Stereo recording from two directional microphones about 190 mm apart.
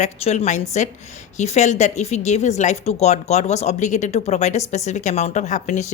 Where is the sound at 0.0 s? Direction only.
35° left (ahead or behind).